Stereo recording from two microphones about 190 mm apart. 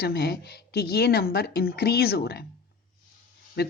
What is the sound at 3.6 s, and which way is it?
Speech, 60° left (ahead or behind).